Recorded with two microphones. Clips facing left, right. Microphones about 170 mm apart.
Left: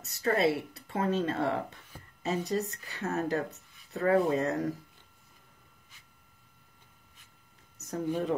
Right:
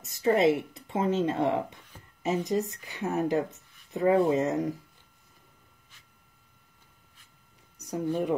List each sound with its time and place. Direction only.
0.0 s speech: 15° right (ahead or behind)
3.5 s a sound: 15° right (ahead or behind)
4.3 s speech: 20° right (ahead or behind)
7.8 s speech: 15° right (ahead or behind)